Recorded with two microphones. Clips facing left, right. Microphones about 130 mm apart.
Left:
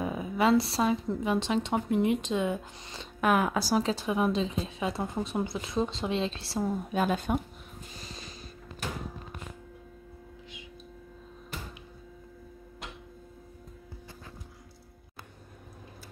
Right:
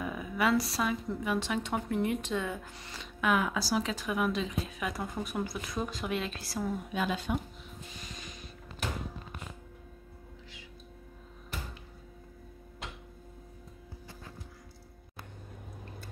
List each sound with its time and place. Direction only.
0.0 s a woman's voice: 25° left (ahead or behind)
3.0 s speech: 45° left (ahead or behind)
3.8 s a woman's voice: 30° left (ahead or behind)
6.9 s speech: 45° left (ahead or behind)